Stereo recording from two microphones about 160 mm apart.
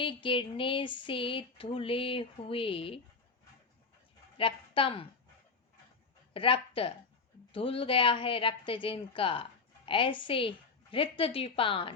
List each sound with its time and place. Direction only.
0.0 s a woman's voice: 30° left (ahead or behind)
4.4 s a woman's voice: 35° left (ahead or behind)
6.3 s a woman's voice: 35° left (ahead or behind)